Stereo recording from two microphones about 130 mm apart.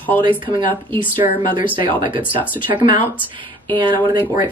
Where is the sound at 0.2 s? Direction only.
35° right (ahead or behind).